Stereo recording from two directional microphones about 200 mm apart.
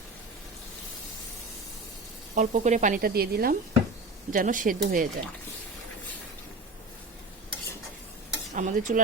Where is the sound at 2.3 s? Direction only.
35° right (ahead or behind).